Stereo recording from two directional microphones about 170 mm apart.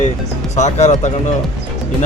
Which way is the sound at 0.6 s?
40° left (ahead or behind).